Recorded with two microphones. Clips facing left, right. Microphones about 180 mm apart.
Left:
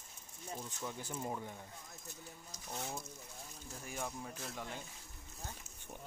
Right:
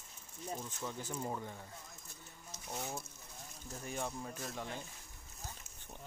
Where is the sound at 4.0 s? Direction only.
10° right (ahead or behind).